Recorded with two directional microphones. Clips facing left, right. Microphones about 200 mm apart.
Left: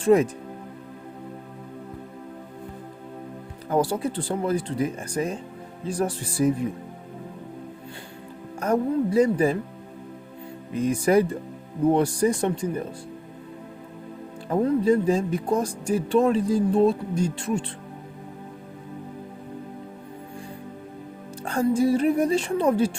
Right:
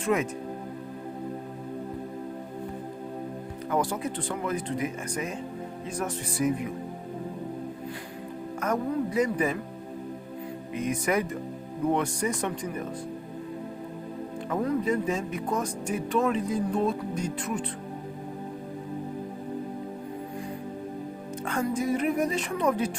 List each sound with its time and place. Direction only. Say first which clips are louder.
0.0 s speech: left 8 dB; 35° left (ahead or behind)
3.7 s speech: left 5 dB; 30° left (ahead or behind)
8.6 s speech: left 5 dB; 30° left (ahead or behind)
10.8 s speech: left 7 dB; 30° left (ahead or behind)
14.5 s speech: left 6 dB; 30° left (ahead or behind)
21.4 s speech: left 7 dB; 30° left (ahead or behind)